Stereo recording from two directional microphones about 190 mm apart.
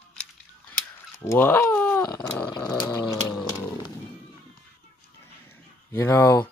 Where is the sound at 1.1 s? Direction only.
15° left (ahead or behind).